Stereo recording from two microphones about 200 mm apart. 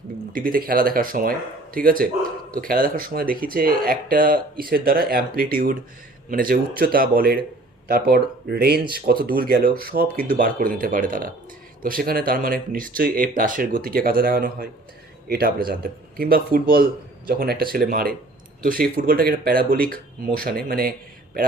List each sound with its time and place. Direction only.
0.3 s speech: 45° right (ahead or behind)